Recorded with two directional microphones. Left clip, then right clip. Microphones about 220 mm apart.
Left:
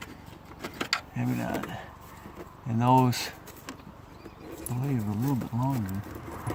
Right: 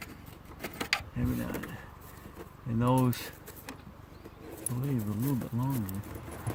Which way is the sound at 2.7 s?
35° left (ahead or behind).